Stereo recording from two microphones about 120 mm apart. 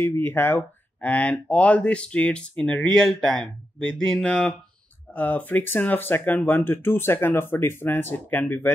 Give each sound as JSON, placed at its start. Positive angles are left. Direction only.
{"t": 0.0, "sound": "speech", "side_deg": 20}